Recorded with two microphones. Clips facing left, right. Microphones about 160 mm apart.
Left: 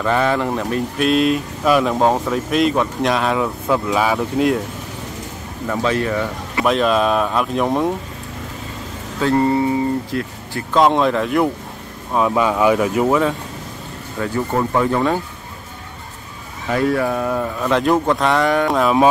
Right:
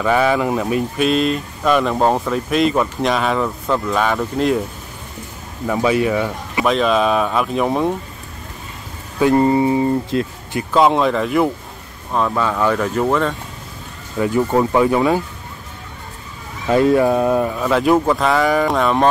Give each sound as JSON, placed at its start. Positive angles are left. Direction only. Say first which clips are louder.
{"t": 0.0, "sound": "speech", "louder": "right 2 dB", "side_deg": -5}
{"t": 5.7, "sound": "speech", "louder": "right 3 dB", "side_deg": -10}
{"t": 6.6, "sound": "speech", "louder": "even", "side_deg": 0}
{"t": 9.2, "sound": "speech", "louder": "right 2 dB", "side_deg": -15}
{"t": 10.7, "sound": "speech", "louder": "even", "side_deg": 0}
{"t": 12.1, "sound": "speech", "louder": "left 2 dB", "side_deg": 10}
{"t": 14.2, "sound": "speech", "louder": "right 4 dB", "side_deg": -15}
{"t": 16.7, "sound": "speech", "louder": "right 5 dB", "side_deg": -20}
{"t": 17.6, "sound": "speech", "louder": "right 1 dB", "side_deg": -5}